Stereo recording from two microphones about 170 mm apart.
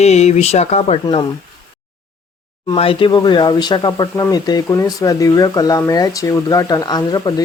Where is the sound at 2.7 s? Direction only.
30° left (ahead or behind).